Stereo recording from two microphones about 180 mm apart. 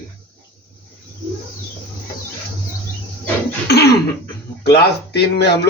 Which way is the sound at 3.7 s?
65° left (ahead or behind).